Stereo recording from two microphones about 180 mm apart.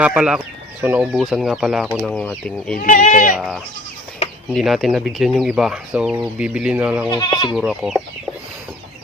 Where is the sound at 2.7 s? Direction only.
45° left (ahead or behind).